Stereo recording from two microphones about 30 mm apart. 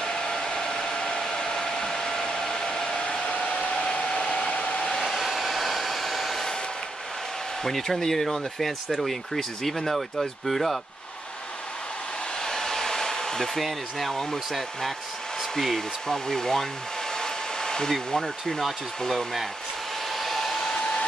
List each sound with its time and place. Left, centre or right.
0.0 s hair dryer: left
3.0 s hair dryer: left
3.4 s hair dryer: left
3.8 s hair dryer: left
4.9 s hair dryer: centre
7.9 s speech: centre
8.9 s hair dryer: centre
12.4 s hair dryer: centre
13.6 s hair dryer: centre
15.6 s speech: centre
17.1 s hair dryer: centre
17.8 s speech: centre
20.1 s hair dryer: centre